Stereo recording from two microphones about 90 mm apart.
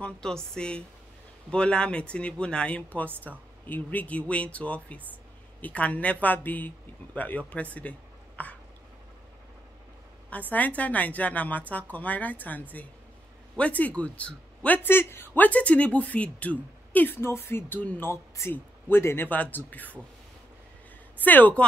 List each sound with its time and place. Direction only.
0.0 s speech: 10° left (ahead or behind)
8.4 s hiccup: 15° left (ahead or behind)
10.5 s speech: 15° left (ahead or behind)
21.2 s speech: 20° left (ahead or behind)